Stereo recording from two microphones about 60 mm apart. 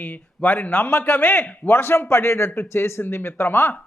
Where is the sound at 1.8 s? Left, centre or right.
Left.